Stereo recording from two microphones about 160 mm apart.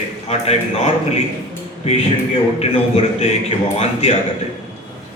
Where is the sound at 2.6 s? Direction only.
40° left (ahead or behind).